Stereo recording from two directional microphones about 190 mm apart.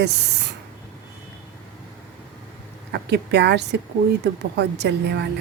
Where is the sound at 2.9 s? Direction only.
60° right (ahead or behind).